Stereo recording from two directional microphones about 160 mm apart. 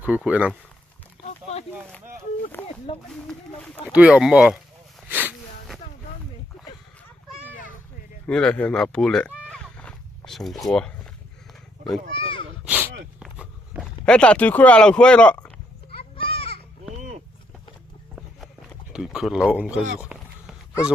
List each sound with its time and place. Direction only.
0.3 s speech: 10° right (ahead or behind)
1.2 s boat: 40° left (ahead or behind)
2.6 s a sound: 40° left (ahead or behind)
3.1 s speech: 5° left (ahead or behind)
3.9 s speech: 5° right (ahead or behind)
5.0 s a sound: 10° right (ahead or behind)
8.3 s speech: 5° left (ahead or behind)
11.9 s speech: 35° left (ahead or behind)
12.6 s a sound: 10° right (ahead or behind)
14.0 s speech: 5° left (ahead or behind)
15.9 s children playing: 35° left (ahead or behind)
18.3 s a sound: centre (ahead or behind)
20.0 s run: 5° right (ahead or behind)